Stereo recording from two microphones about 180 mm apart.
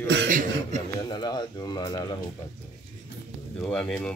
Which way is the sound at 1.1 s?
25° left (ahead or behind).